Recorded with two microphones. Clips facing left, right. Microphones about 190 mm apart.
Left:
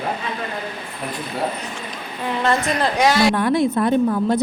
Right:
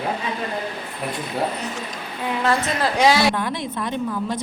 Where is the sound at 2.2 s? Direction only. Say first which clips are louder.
Left 1 dB; 5° right (ahead or behind).